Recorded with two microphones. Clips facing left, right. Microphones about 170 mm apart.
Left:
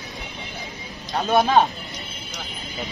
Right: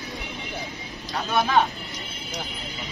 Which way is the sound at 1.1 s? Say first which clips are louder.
Left 5 dB; 40° left (ahead or behind).